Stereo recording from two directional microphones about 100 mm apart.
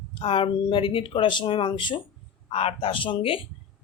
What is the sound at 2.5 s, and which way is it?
Speech, 85° left.